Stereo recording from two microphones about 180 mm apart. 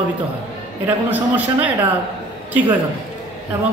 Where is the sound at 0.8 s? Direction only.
10° right (ahead or behind).